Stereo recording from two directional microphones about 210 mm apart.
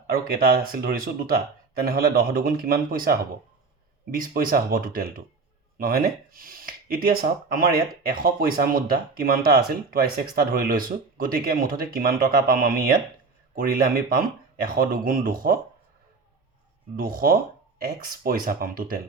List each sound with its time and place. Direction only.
0.1 s speech: 45° right (ahead or behind)
17.0 s speech: 45° right (ahead or behind)